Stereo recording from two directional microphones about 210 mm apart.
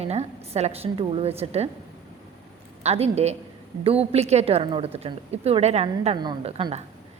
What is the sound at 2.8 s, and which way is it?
A man's voice, 30° right (ahead or behind).